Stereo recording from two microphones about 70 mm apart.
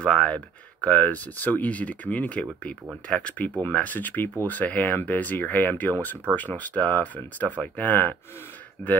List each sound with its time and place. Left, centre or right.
0.0 s speech: centre